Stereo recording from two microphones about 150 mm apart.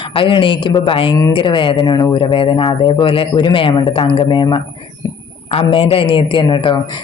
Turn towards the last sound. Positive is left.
turn(degrees=30)  # may be behind; listen again after turning